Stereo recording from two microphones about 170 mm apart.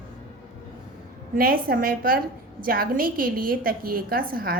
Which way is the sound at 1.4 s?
60° right (ahead or behind).